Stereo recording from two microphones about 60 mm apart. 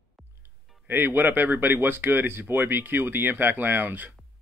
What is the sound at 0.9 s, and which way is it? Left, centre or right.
Speech, right.